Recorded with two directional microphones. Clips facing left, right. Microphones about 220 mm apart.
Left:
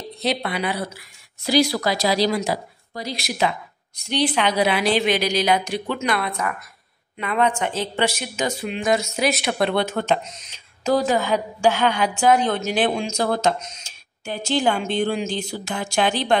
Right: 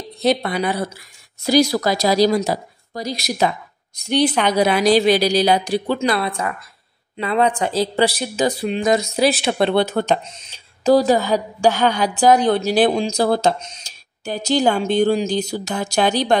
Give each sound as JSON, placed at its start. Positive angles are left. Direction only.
{"t": 0.2, "sound": "a woman's voice", "side_deg": -45}